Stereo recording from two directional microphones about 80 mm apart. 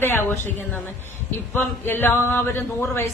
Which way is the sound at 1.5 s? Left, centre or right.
Left.